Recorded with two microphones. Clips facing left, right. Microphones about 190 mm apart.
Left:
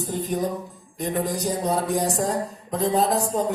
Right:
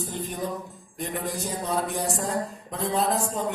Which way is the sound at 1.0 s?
40° left (ahead or behind).